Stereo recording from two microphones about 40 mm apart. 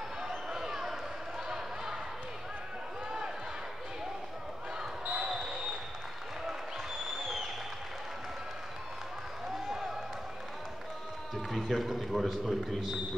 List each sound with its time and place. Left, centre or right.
0.5 s a sound: centre
5.0 s basketball bounce: right
5.3 s basketball bounce: centre
6.4 s applause: centre
9.5 s a sound: centre
11.3 s a man's voice: centre